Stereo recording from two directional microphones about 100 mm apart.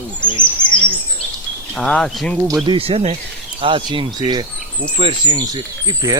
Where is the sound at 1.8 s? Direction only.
5° left (ahead or behind).